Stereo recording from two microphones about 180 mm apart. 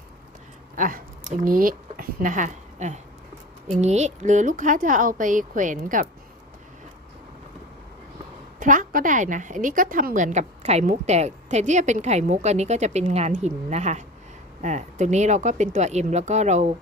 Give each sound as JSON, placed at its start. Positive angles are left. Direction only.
{"t": 0.8, "sound": "a woman's voice", "side_deg": -50}
{"t": 8.5, "sound": "a woman's voice", "side_deg": -45}